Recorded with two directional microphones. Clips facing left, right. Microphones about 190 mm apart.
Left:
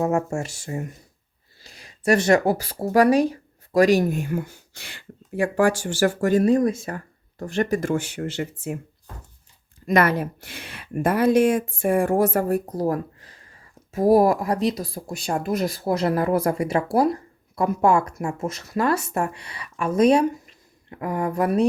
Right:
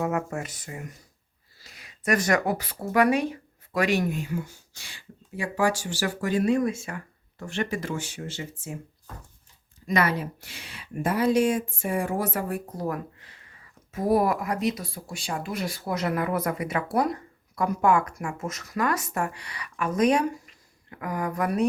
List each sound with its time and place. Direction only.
0.0 s speech: 30° left (ahead or behind)
4.2 s speech: 55° left (ahead or behind)
9.8 s speech: 50° left (ahead or behind); by 15.0 s 35° left (ahead or behind)
15.1 s speech: 45° left (ahead or behind); by 21.7 s 30° left (ahead or behind)